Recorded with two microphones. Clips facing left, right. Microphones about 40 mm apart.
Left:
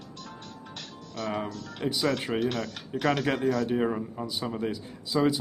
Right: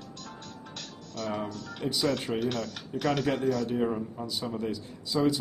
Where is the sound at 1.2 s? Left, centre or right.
Centre.